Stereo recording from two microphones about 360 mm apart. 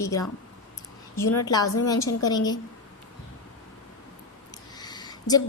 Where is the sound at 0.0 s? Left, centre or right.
Centre.